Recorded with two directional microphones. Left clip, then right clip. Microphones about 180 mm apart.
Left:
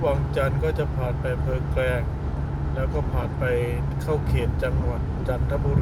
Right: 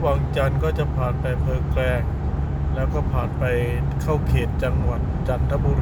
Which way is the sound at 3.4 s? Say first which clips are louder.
Even; 10° right (ahead or behind).